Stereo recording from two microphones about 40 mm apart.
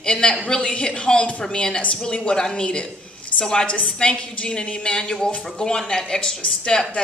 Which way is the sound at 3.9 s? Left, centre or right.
Left.